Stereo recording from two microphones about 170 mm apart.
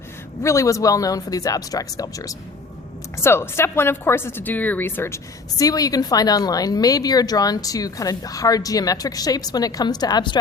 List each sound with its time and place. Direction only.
0.4 s a woman's voice: 20° left (ahead or behind)